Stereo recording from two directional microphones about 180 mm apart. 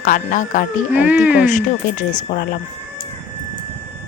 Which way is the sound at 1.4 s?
45° left (ahead or behind).